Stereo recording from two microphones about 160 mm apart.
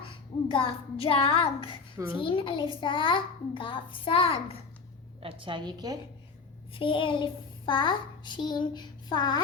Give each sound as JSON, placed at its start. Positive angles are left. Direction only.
{"t": 0.1, "sound": "a child's voice", "side_deg": 35}
{"t": 5.2, "sound": "a woman's voice", "side_deg": -30}
{"t": 6.7, "sound": "child singing", "side_deg": 30}